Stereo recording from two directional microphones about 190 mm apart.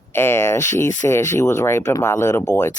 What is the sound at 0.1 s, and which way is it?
Speech, 10° left (ahead or behind).